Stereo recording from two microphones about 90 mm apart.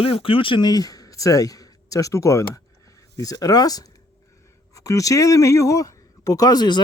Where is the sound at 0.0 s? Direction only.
90° left.